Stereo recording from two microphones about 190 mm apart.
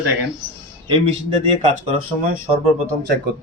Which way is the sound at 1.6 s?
40° right (ahead or behind).